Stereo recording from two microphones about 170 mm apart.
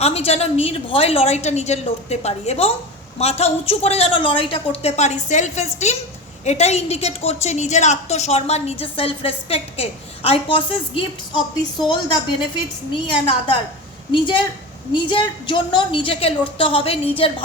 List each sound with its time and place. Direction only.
0.0 s a woman's voice: 35° left (ahead or behind)
12.9 s a woman's voice: 30° left (ahead or behind)